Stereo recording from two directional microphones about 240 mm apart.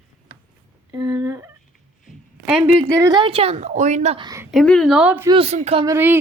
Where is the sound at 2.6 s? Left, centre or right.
Centre.